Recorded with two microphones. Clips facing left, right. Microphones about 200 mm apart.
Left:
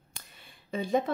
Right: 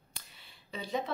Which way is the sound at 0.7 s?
50° left (ahead or behind).